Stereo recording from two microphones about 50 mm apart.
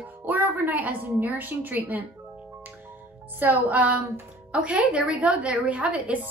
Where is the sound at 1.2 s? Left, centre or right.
Right.